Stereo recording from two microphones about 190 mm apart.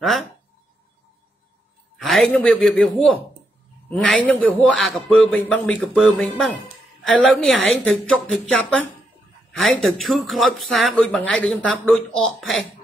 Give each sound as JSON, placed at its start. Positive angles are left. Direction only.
{"t": 2.0, "sound": "a man's voice", "side_deg": 0}